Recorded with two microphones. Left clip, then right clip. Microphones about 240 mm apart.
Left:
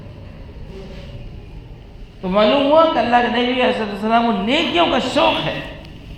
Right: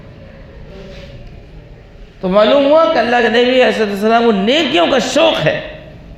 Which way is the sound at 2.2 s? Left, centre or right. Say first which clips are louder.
Right 5 dB; right.